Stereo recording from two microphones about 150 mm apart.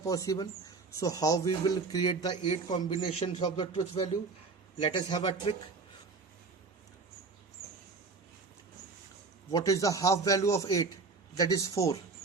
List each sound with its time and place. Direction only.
0.0 s speech: 20° left (ahead or behind)
4.8 s speech: 30° left (ahead or behind)
9.5 s speech: 20° left (ahead or behind)